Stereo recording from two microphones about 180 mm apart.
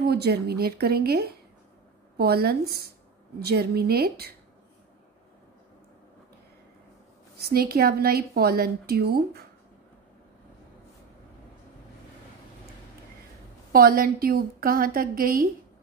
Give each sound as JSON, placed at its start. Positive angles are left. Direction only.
{"t": 0.0, "sound": "a woman's voice", "side_deg": -65}
{"t": 7.4, "sound": "a woman's voice", "side_deg": -60}
{"t": 13.7, "sound": "a woman's voice", "side_deg": -55}